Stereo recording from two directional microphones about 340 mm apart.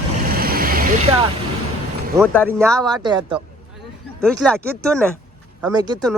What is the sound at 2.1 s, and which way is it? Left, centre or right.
Speech, centre.